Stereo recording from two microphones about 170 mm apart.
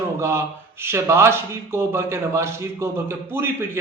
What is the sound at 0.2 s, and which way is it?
Speech, 15° right (ahead or behind).